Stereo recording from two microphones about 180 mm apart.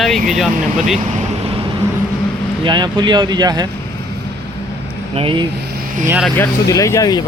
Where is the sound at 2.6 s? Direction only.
25° right (ahead or behind).